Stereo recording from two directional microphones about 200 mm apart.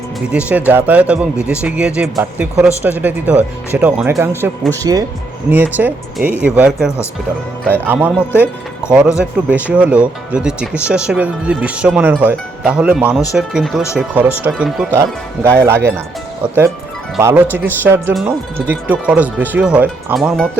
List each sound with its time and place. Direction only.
0.3 s speech: 5° right (ahead or behind)
9.1 s speech: 5° right (ahead or behind)
17.2 s speech: 15° right (ahead or behind)
18.1 s speech: centre (ahead or behind)